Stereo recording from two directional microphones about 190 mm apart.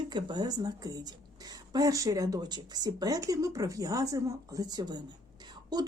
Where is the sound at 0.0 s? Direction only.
25° right (ahead or behind).